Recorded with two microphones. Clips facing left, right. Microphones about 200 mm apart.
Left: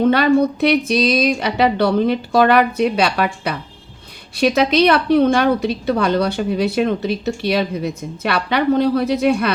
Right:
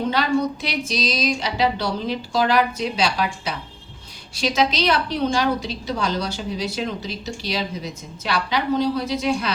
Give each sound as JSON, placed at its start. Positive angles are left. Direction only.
{"t": 0.0, "sound": "a woman's voice", "side_deg": 60}